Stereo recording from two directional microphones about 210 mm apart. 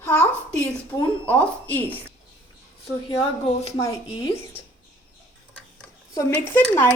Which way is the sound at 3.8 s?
15° left (ahead or behind).